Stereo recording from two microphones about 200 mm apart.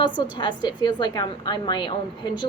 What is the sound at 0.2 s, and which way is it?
A woman's voice, 20° left (ahead or behind).